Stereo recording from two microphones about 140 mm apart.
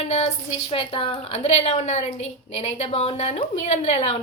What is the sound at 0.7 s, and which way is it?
A woman's voice, 40° left (ahead or behind).